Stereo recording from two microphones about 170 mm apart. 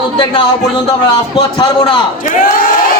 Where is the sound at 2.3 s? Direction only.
55° left (ahead or behind).